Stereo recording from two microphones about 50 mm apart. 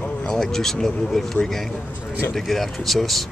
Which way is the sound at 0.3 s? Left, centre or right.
Centre.